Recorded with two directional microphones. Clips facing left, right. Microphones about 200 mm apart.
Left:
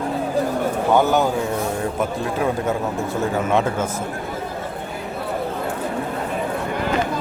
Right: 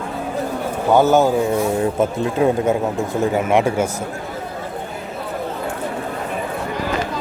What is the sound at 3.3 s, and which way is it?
Speech, 15° right (ahead or behind).